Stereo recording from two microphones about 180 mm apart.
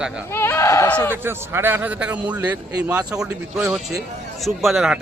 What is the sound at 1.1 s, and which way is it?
A man's voice, 10° right (ahead or behind).